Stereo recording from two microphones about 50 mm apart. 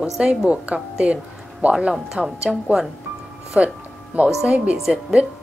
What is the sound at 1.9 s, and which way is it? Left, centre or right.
Speech, centre.